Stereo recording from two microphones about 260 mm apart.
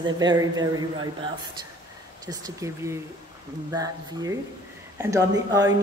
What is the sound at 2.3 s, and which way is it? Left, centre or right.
Speech, centre.